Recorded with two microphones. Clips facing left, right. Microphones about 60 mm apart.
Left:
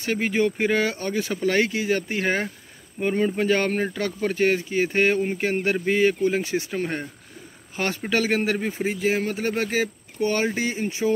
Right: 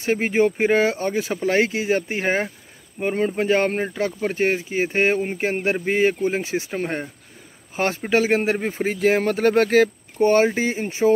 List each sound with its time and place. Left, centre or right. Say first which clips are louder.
0.0 s speech: right 4 dB; right
8.8 s speech: right 6 dB; right
10.1 s speech: right 6 dB; right